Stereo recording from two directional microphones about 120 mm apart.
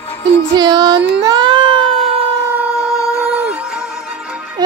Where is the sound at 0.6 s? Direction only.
35° right (ahead or behind).